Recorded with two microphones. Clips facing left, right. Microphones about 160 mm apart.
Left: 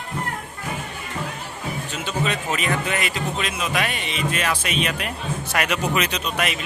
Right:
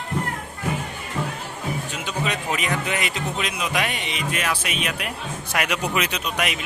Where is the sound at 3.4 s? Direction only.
15° right (ahead or behind).